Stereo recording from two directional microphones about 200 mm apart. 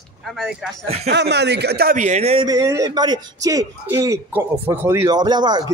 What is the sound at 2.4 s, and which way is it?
A man's voice, 20° right (ahead or behind).